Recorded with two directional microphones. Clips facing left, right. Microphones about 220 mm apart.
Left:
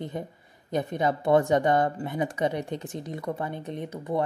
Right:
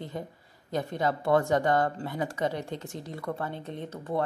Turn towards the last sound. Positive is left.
turn(degrees=15)  # may be behind; listen again after turning